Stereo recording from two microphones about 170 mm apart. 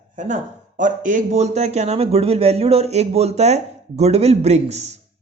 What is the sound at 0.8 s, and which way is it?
A man's voice, 50° right (ahead or behind).